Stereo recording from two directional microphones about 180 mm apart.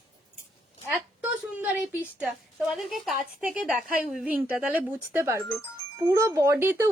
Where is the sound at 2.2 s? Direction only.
5° right (ahead or behind).